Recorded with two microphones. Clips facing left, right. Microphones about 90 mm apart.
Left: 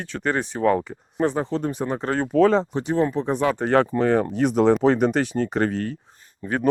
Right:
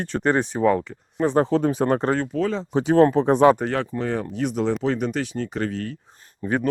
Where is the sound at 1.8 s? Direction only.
75° right (ahead or behind).